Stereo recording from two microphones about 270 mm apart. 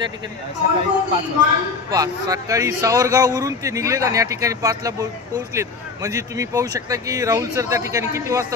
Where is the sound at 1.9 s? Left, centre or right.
Centre.